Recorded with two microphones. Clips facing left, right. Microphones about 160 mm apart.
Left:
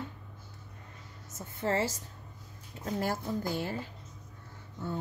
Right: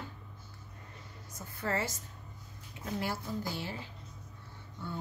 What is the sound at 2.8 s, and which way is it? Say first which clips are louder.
Speech: left 4 dB; 45° left (ahead or behind).